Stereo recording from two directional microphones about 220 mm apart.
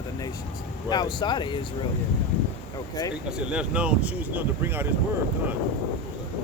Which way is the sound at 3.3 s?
5° right (ahead or behind).